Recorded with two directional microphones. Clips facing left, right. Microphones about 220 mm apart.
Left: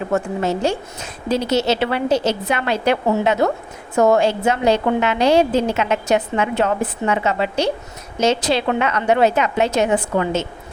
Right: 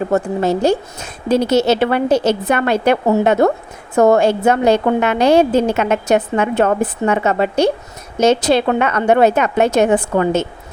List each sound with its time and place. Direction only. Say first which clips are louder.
0.1 s a woman's voice: right 2 dB; 35° right (ahead or behind)
1.3 s a woman's voice: right 5 dB; 50° right (ahead or behind)